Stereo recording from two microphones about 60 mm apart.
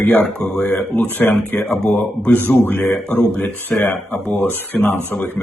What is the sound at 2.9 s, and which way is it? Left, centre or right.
Speech, centre.